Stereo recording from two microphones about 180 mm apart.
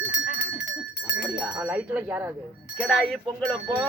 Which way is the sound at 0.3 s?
65° left (ahead or behind).